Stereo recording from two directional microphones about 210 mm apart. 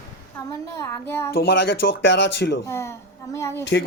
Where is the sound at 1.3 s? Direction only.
55° left (ahead or behind).